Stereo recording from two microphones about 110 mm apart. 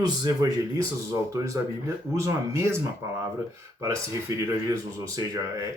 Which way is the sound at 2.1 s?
25° right (ahead or behind).